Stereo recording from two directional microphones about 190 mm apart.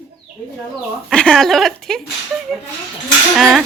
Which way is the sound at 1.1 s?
5° left (ahead or behind).